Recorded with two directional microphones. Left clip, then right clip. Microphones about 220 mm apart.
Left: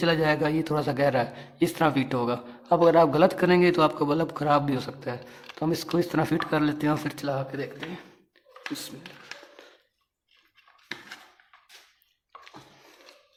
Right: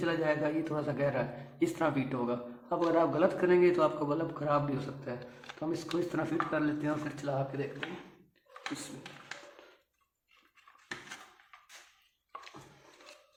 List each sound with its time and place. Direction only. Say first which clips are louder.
0.0 s a man's voice: left 7 dB; 40° left (ahead or behind)